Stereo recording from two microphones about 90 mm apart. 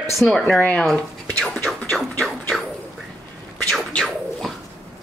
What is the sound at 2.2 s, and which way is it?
Music, 5° left (ahead or behind).